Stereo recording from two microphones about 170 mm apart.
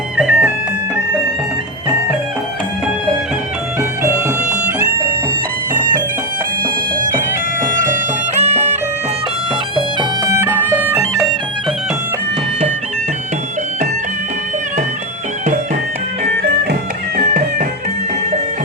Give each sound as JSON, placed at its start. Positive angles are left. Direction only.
{"t": 0.2, "sound": "music", "side_deg": -5}
{"t": 7.6, "sound": "music", "side_deg": -50}
{"t": 9.7, "sound": "bagpipes", "side_deg": -25}
{"t": 10.3, "sound": "music", "side_deg": -15}